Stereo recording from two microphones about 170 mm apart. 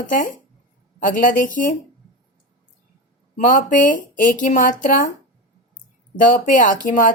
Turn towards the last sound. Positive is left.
turn(degrees=50)  # may be behind; listen again after turning